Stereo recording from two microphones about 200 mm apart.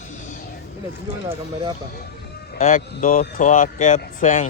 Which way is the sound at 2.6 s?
40° left (ahead or behind).